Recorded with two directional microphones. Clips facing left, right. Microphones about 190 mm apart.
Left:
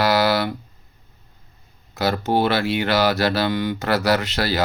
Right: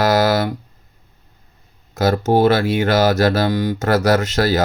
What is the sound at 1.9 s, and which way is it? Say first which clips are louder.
Mantra: right 5 dB; 45° right (ahead or behind).